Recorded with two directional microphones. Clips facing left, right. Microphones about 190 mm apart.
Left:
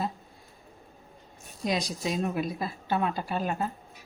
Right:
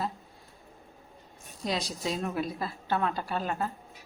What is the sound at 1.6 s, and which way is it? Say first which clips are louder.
A woman's voice: left 2 dB; 15° left (ahead or behind).